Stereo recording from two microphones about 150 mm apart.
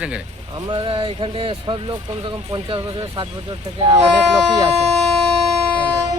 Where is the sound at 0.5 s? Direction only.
30° right (ahead or behind).